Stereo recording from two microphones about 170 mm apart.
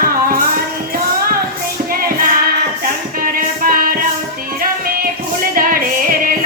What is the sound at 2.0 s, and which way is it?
Music, 60° right (ahead or behind).